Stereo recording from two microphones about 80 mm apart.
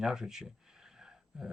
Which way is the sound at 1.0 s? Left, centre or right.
Centre.